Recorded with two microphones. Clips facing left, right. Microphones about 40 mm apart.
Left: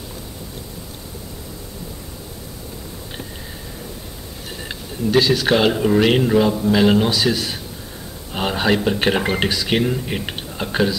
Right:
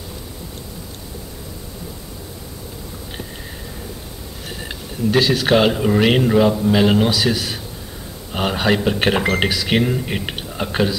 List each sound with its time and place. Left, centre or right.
4.6 s speech: centre